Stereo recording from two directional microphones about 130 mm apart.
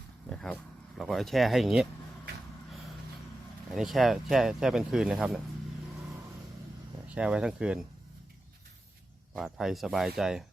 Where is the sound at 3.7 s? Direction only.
Centre (ahead or behind).